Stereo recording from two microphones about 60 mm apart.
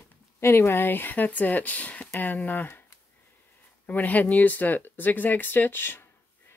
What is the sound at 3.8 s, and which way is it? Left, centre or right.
Speech, left.